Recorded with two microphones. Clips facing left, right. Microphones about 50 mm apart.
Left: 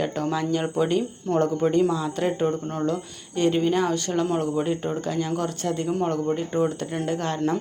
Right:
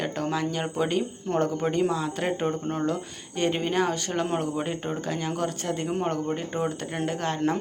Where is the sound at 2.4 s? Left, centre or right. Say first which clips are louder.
Left 2 dB; centre.